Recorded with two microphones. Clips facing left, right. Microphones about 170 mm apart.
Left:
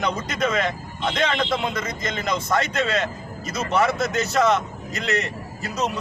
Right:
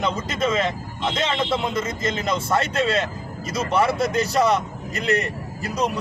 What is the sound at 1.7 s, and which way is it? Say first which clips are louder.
Speech: right 3 dB; 30° right (ahead or behind).